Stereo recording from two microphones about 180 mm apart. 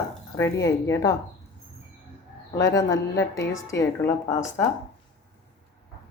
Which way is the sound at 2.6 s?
20° left (ahead or behind).